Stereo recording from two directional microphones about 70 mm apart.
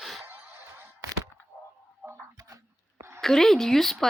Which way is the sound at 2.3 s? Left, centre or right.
Right.